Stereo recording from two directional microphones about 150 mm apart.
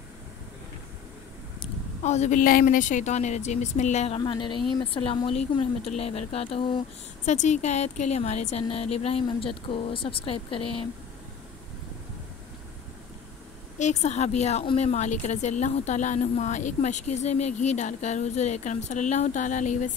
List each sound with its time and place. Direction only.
2.0 s a woman's voice: 50° left (ahead or behind)
4.2 s speech: 30° left (ahead or behind)
7.2 s a woman's voice: 50° left (ahead or behind)
13.7 s a woman's voice: 50° left (ahead or behind)